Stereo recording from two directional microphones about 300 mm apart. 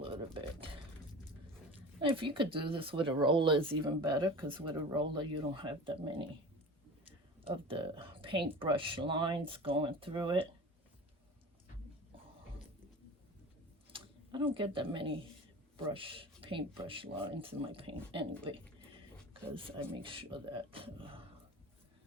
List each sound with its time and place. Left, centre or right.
0.3 s a sound: centre
2.0 s speech: centre
7.4 s speech: centre
13.9 s speech: centre
18.4 s a sound: centre
19.3 s speech: centre